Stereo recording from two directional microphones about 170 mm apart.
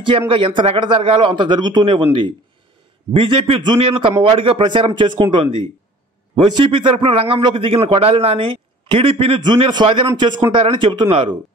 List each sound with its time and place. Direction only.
0.3 s speech: 30° right (ahead or behind)
3.1 s a man's voice: 30° right (ahead or behind)